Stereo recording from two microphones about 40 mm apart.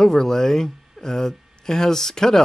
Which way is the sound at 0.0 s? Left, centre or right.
Centre.